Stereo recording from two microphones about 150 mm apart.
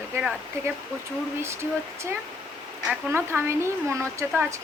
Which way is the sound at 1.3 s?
15° right (ahead or behind).